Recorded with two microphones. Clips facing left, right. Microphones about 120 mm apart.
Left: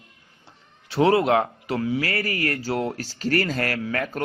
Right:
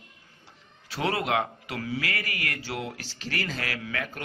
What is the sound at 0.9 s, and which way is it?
A man's voice, 25° left (ahead or behind).